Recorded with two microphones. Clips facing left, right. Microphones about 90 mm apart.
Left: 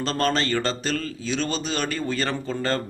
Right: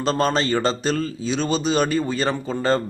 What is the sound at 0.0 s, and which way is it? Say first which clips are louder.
A man's voice: right 3 dB; 15° right (ahead or behind).